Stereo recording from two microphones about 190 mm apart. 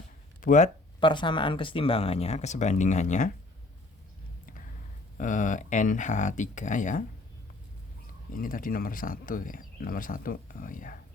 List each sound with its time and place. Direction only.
0.4 s speech: 40° left (ahead or behind)
0.9 s speech: 25° left (ahead or behind); by 3.3 s 40° left (ahead or behind)
5.1 s speech: 40° left (ahead or behind)
8.3 s speech: 45° left (ahead or behind)